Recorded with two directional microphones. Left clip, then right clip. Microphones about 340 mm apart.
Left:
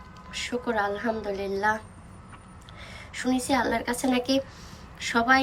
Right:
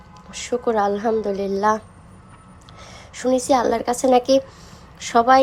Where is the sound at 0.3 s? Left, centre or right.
Centre.